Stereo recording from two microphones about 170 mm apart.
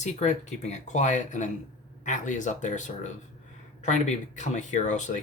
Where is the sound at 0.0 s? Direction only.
45° left (ahead or behind).